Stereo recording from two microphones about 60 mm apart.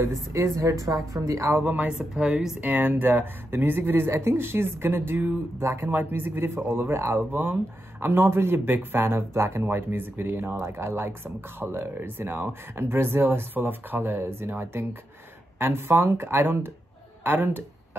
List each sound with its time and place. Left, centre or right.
0.0 s a woman's voice: right
1.6 s speech: right
1.9 s speech: centre
2.6 s speech: right
5.6 s a woman's voice: right
5.9 s speech: right